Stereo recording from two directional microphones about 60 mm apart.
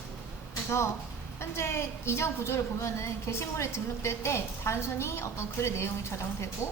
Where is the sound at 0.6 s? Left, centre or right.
Left.